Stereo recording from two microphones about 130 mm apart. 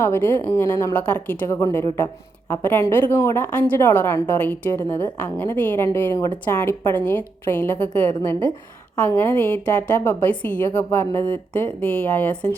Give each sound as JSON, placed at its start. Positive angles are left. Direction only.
{"t": 0.0, "sound": "speech", "side_deg": 15}
{"t": 0.9, "sound": "a woman's voice", "side_deg": 10}